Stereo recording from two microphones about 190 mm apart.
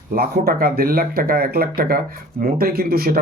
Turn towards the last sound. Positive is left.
turn(degrees=-55)  # may be behind; listen again after turning